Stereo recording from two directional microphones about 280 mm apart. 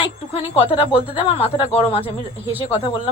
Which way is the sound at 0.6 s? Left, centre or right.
Centre.